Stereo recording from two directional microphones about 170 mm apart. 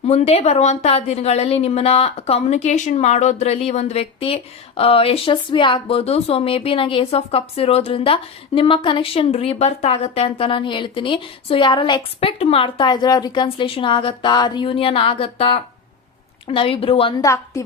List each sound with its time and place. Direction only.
0.1 s speech: 35° left (ahead or behind)
17.2 s a woman's voice: 20° left (ahead or behind)